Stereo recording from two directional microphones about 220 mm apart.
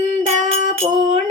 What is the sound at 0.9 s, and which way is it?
Music, 35° right (ahead or behind).